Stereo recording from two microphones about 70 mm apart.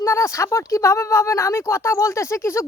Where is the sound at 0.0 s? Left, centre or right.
Left.